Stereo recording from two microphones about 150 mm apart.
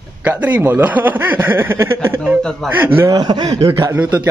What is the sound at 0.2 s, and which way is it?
Speech, 10° right (ahead or behind).